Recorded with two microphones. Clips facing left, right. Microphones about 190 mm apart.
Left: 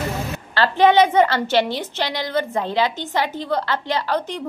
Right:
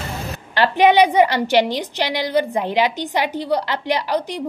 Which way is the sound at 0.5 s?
15° right (ahead or behind).